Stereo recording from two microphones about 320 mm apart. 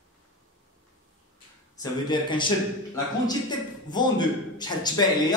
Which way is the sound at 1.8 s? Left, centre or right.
Centre.